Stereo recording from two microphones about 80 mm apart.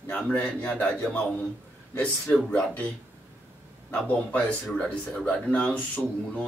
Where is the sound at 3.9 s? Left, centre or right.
Centre.